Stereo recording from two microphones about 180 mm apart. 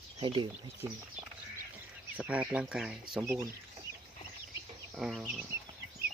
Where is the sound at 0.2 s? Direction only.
25° right (ahead or behind).